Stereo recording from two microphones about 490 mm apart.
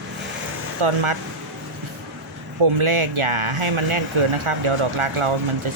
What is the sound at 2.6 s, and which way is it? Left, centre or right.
Speech, right.